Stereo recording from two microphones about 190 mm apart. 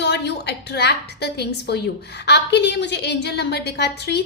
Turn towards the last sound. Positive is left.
turn(degrees=60)  # may be behind; listen again after turning